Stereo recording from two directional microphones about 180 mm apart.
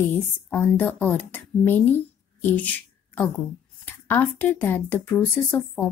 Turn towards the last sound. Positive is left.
turn(degrees=10)  # may be behind; listen again after turning